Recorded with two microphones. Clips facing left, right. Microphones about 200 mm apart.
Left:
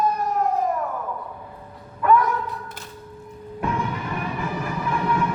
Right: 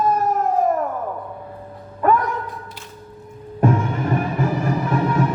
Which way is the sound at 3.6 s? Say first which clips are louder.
Right 7 dB; 45° right (ahead or behind).